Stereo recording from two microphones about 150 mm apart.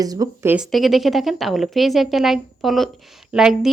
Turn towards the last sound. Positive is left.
turn(degrees=-5)  # may be behind; listen again after turning